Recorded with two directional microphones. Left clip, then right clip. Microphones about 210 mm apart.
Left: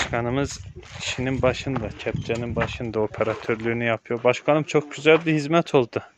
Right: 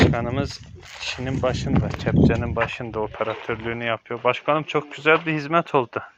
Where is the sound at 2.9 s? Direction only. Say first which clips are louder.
Left 2 dB; 35° left (ahead or behind).